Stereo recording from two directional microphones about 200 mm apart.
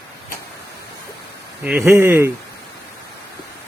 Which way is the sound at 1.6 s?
10° right (ahead or behind).